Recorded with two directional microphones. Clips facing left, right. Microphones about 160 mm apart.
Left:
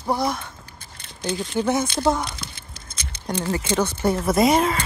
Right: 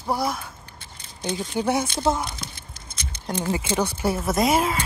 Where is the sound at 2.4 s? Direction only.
90° left.